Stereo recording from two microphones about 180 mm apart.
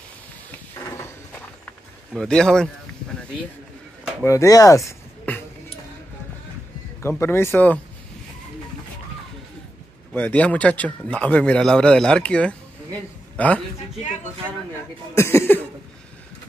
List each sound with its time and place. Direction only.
0.7 s a sound: 15° left (ahead or behind)
2.1 s speech: 5° left (ahead or behind)
4.2 s speech: 15° left (ahead or behind)
7.0 s a man's voice: 15° left (ahead or behind)
10.1 s a man's voice: 10° left (ahead or behind)
15.1 s a man's voice: 15° left (ahead or behind)